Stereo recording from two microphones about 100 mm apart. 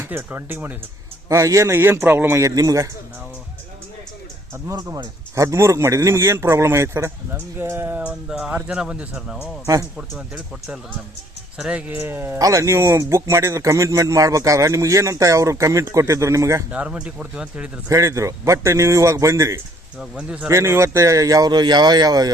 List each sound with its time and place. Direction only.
0.0 s a man's voice: 20° right (ahead or behind)
1.3 s a man's voice: 30° right (ahead or behind)
2.4 s speech: 35° right (ahead or behind)
4.7 s a man's voice: 35° right (ahead or behind); by 11.8 s 5° right (ahead or behind)
11.9 s a man's voice: 20° right (ahead or behind)
16.7 s speech: 10° right (ahead or behind)
17.8 s speech: 30° right (ahead or behind)
20.0 s speech: 10° right (ahead or behind)
20.5 s speech: 30° right (ahead or behind)